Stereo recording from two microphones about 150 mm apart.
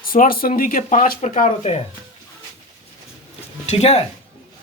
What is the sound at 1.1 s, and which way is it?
Speech, 55° left (ahead or behind).